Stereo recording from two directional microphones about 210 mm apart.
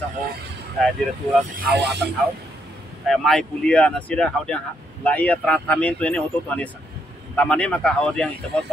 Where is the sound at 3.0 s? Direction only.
Centre (ahead or behind).